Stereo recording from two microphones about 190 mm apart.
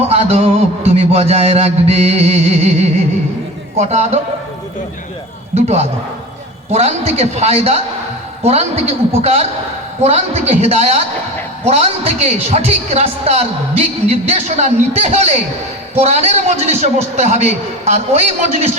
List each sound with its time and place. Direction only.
0.1 s a woman's voice: 35° right (ahead or behind)
5.5 s a woman's voice: 35° right (ahead or behind)